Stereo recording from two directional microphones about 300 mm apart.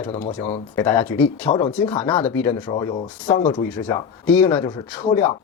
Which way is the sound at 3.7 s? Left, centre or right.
Centre.